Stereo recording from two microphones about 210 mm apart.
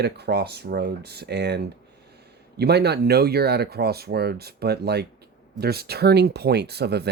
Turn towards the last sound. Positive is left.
turn(degrees=-50)  # may be behind; listen again after turning